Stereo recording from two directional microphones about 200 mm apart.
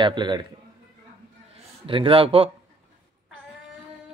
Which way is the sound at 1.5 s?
25° right (ahead or behind).